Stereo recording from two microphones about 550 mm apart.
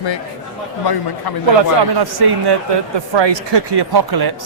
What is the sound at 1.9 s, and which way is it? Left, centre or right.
Speech, right.